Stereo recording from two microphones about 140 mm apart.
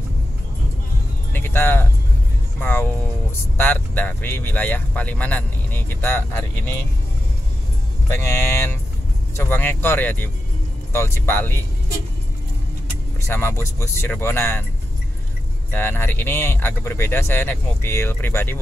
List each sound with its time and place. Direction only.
1.3 s vehicle: 15° left (ahead or behind)
2.6 s music: 15° left (ahead or behind)
3.5 s speech: 15° left (ahead or behind)
8.1 s speech: 20° left (ahead or behind)
13.3 s speech: 15° left (ahead or behind)
15.7 s speech: 15° left (ahead or behind)